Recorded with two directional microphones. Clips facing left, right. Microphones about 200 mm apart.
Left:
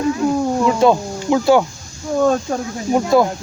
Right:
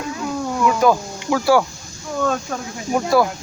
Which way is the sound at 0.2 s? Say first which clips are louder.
Left 5 dB; 35° left (ahead or behind).